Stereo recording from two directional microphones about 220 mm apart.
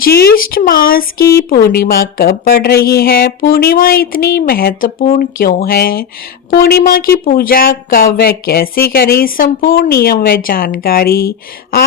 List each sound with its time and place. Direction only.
0.0 s speech: 45° left (ahead or behind)